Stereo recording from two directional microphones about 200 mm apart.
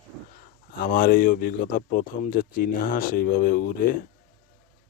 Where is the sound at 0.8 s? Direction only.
45° left (ahead or behind).